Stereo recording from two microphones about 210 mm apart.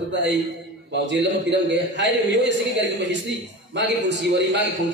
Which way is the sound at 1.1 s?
55° right (ahead or behind).